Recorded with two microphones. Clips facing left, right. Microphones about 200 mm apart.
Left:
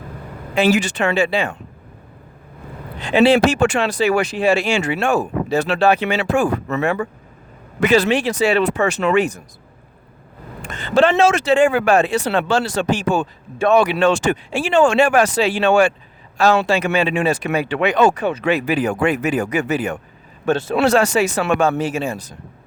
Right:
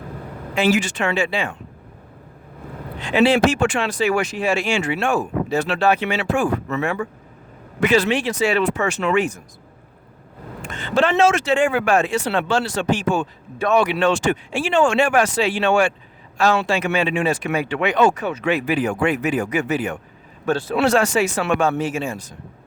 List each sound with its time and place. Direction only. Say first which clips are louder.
0.5 s speech: left 2 dB; 35° left (ahead or behind)
3.0 s speech: left 3 dB; 30° left (ahead or behind)
10.6 s speech: left 4 dB; 40° left (ahead or behind)
20.4 s speech: left 3 dB; 25° left (ahead or behind)
20.7 s speech: left 2 dB; 40° left (ahead or behind)